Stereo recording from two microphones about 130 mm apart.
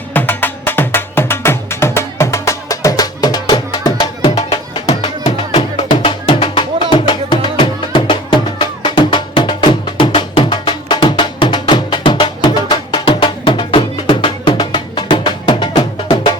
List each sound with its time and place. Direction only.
0.1 s music: 15° left (ahead or behind); by 4.9 s 35° left (ahead or behind)
5.2 s music: 55° left (ahead or behind)
6.1 s music: 40° left (ahead or behind)